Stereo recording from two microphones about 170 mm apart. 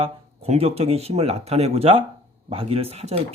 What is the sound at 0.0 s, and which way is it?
Speech, 35° right (ahead or behind).